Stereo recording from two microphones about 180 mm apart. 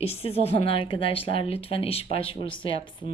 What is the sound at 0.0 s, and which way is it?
A woman's voice, 35° left (ahead or behind).